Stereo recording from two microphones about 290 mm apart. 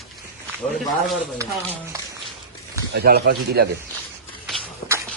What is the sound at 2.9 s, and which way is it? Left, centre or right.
Speech, right.